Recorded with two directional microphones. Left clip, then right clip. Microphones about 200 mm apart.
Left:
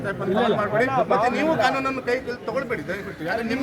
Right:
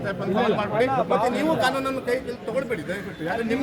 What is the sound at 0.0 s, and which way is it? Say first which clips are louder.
Speech: left 1 dB; 55° left (ahead or behind).